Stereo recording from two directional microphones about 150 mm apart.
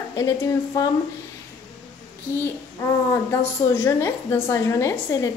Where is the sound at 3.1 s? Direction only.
15° left (ahead or behind).